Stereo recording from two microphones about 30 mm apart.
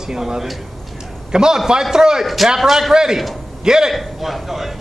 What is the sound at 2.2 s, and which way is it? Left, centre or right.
Speech, centre.